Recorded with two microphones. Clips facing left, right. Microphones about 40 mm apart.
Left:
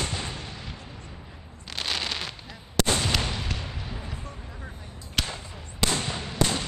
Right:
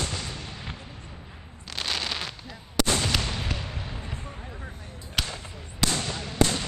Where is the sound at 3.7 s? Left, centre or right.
Centre.